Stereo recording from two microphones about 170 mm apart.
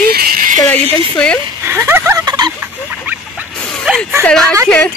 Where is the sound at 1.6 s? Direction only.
15° right (ahead or behind).